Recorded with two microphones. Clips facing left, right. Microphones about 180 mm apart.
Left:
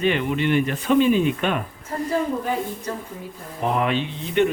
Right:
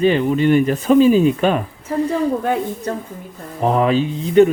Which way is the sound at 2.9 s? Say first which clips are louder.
Right 6 dB; 60° right (ahead or behind).